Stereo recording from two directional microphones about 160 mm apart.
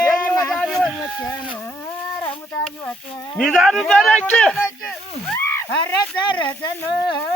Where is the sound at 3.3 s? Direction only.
5° left (ahead or behind).